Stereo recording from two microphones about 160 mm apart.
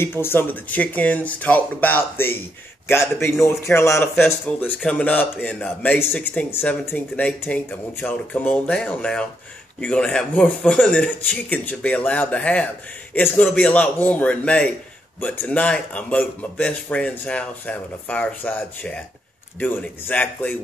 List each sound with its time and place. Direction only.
0.0 s speech: 15° left (ahead or behind)